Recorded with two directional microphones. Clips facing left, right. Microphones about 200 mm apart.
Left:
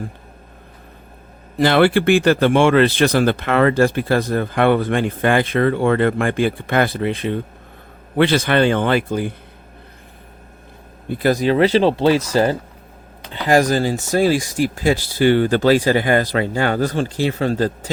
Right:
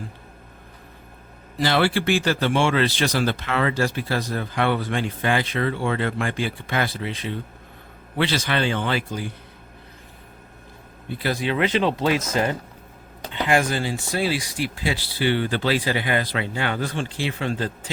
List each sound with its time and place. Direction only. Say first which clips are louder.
1.5 s speech: left 7 dB; 55° left (ahead or behind)
11.1 s speech: left 8 dB; 45° left (ahead or behind)